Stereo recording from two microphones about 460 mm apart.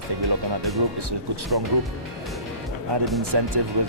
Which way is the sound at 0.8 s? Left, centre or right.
Right.